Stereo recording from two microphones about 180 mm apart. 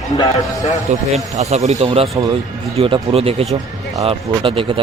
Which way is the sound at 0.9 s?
35° right (ahead or behind).